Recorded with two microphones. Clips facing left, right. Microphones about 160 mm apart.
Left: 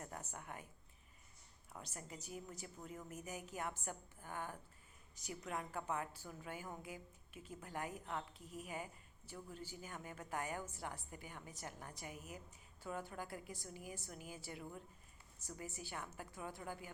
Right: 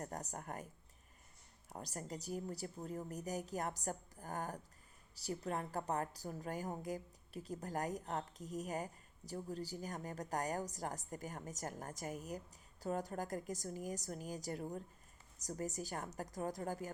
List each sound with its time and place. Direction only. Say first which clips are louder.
0.0 s a woman's voice: right 5 dB; 40° right (ahead or behind)
1.7 s a woman's voice: right 6 dB; 40° right (ahead or behind)